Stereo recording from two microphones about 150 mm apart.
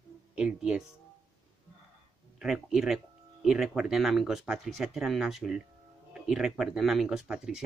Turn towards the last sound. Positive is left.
turn(degrees=-5)  # may be behind; listen again after turning